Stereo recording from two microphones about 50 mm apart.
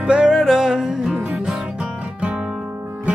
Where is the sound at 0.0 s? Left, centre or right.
Centre.